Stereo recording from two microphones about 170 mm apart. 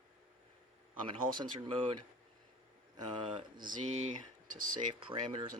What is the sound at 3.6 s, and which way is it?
Speech, 40° right (ahead or behind).